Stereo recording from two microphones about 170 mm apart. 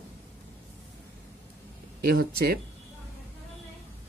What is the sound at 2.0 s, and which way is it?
Speech, 65° right (ahead or behind).